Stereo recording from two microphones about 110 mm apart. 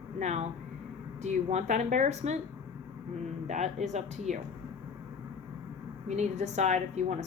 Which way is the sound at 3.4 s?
90° right.